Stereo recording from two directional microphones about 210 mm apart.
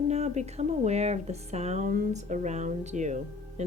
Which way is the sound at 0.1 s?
30° right (ahead or behind).